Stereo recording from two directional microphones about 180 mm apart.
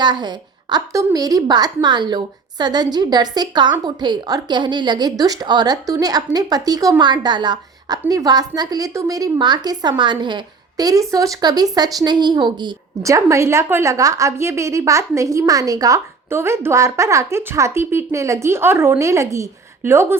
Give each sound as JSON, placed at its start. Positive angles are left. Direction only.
{"t": 0.0, "sound": "a woman's voice", "side_deg": -25}